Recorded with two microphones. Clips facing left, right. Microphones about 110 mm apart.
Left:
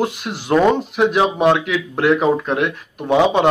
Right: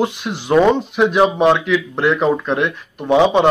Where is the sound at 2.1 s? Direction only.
5° left (ahead or behind).